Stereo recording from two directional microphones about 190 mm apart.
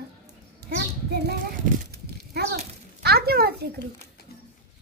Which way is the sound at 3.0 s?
55° right (ahead or behind).